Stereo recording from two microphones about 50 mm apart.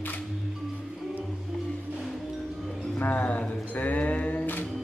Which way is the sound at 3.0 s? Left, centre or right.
Left.